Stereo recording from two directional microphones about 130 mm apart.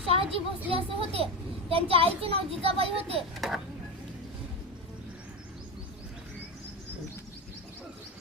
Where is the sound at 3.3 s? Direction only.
Centre (ahead or behind).